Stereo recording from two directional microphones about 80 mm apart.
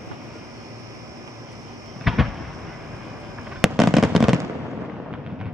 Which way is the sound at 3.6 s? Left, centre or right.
Centre.